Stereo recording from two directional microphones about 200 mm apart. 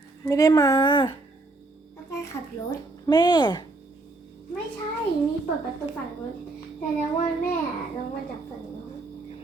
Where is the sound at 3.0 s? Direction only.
20° left (ahead or behind).